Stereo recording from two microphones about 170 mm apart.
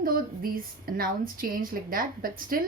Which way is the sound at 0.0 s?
55° right (ahead or behind).